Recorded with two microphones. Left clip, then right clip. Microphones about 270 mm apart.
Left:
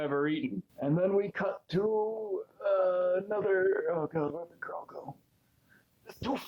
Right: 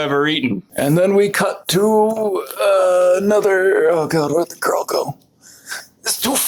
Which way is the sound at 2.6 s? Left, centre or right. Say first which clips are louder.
Right 15 dB; right.